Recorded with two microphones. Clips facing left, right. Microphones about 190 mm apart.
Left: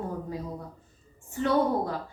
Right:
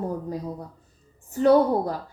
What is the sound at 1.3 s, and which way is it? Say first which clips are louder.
Speech: right 7 dB; 40° right (ahead or behind).